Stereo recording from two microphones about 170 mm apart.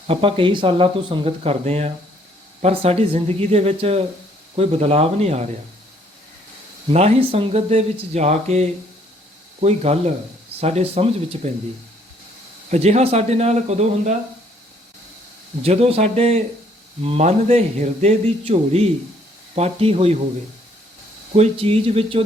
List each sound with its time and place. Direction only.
0.1 s speech: 30° right (ahead or behind)
6.9 s speech: 40° right (ahead or behind)
12.7 s speech: 40° right (ahead or behind)
15.6 s speech: 35° right (ahead or behind)
21.3 s speech: 35° right (ahead or behind)